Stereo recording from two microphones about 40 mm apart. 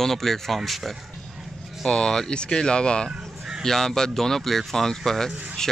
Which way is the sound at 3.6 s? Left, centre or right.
Centre.